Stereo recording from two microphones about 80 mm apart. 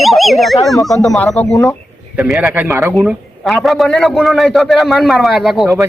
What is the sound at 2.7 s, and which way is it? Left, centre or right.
Speech, right.